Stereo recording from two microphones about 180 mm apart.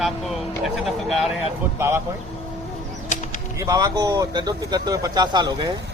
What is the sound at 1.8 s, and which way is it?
Speech, 15° right (ahead or behind).